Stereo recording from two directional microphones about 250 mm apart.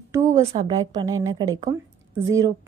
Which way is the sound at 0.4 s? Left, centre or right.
Centre.